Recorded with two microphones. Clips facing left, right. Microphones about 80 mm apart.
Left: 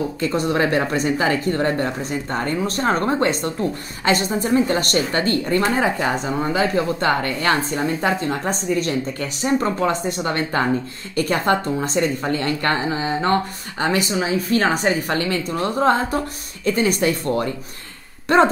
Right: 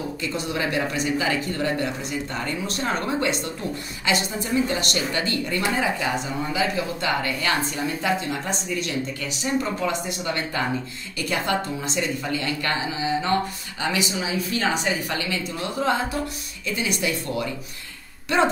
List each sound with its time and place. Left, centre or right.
0.2 s a woman's voice: left